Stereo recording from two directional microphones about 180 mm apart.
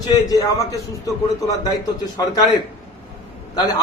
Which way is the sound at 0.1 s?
20° left (ahead or behind).